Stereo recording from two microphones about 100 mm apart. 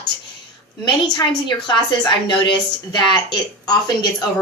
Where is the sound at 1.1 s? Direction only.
45° left (ahead or behind).